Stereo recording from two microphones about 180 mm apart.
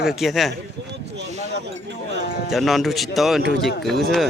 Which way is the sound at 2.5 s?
Centre (ahead or behind).